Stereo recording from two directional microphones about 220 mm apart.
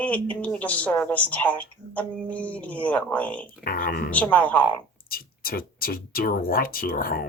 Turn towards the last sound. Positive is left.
turn(degrees=40)  # may be behind; listen again after turning